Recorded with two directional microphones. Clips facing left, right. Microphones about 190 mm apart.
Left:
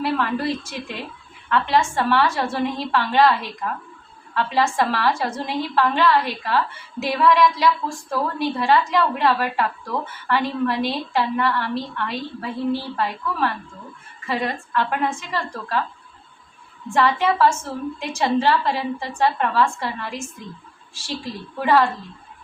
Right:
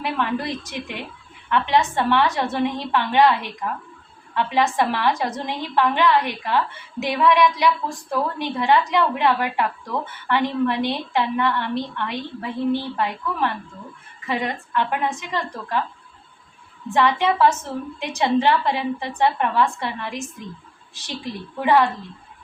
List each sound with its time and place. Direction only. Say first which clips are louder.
0.0 s a woman's voice: left 2 dB; 20° right (ahead or behind)
16.9 s a woman's voice: even; 15° right (ahead or behind)